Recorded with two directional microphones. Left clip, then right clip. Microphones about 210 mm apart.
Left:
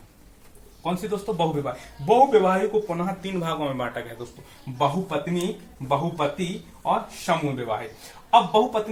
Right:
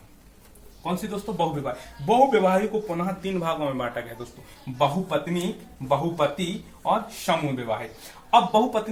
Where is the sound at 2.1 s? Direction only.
10° left (ahead or behind).